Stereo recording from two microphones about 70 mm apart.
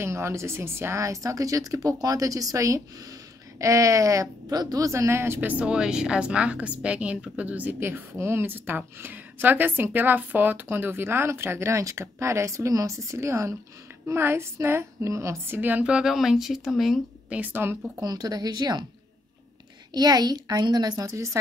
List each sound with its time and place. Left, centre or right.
0.0 s speech: right
5.5 s a woman's voice: centre
7.8 s a woman's voice: right
15.8 s speech: centre
17.3 s speech: right
18.0 s a woman's voice: right
19.9 s a woman's voice: right
21.1 s speech: right